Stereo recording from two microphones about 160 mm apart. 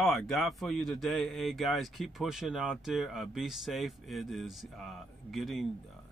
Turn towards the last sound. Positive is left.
turn(degrees=0)  # may be behind; listen again after turning